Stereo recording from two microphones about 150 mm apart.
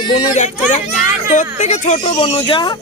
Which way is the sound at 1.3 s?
55° left (ahead or behind).